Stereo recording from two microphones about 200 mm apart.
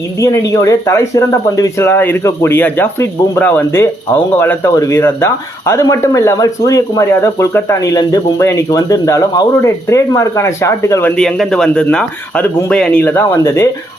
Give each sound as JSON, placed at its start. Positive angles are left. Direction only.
{"t": 0.2, "sound": "speech", "side_deg": 15}